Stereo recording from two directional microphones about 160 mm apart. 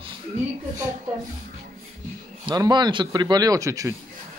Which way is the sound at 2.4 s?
25° right (ahead or behind).